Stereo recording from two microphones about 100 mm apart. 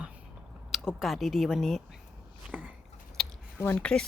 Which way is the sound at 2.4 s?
15° right (ahead or behind).